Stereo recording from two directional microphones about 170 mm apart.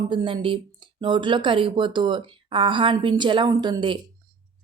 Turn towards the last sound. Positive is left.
turn(degrees=-25)  # may be behind; listen again after turning